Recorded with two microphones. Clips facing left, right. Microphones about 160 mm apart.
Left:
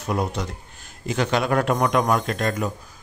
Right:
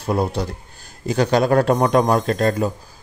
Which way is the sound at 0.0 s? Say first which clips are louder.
Right 4 dB; 30° right (ahead or behind).